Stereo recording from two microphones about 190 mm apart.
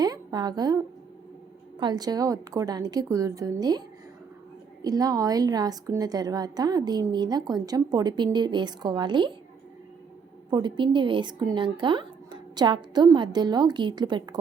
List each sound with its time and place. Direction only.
0.0 s a sound: 20° right (ahead or behind)
1.8 s a woman's voice: 20° right (ahead or behind)
10.5 s a woman's voice: 25° right (ahead or behind)